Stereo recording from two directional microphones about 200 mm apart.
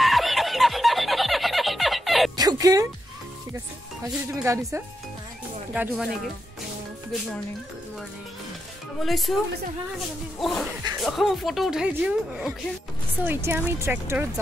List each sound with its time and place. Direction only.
0.0 s snicker: centre (ahead or behind)
2.3 s fowl: 20° right (ahead or behind)
4.0 s speech: 15° right (ahead or behind)
9.0 s speech: centre (ahead or behind)
10.4 s speech: centre (ahead or behind)